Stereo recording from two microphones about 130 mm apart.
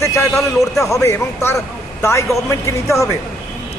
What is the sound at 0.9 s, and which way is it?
A man's voice, 25° left (ahead or behind).